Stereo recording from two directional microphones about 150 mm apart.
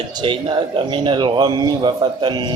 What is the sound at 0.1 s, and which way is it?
A man's voice, 30° right (ahead or behind).